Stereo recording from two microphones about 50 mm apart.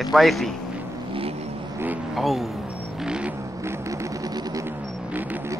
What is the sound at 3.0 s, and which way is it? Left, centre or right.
Vehicle, centre.